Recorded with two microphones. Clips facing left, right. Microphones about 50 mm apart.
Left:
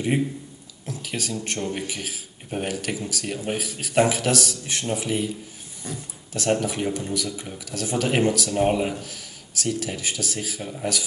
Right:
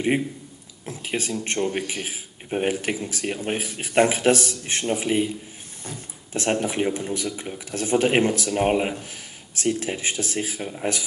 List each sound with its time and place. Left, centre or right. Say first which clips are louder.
0.8 s speech: right 2 dB; right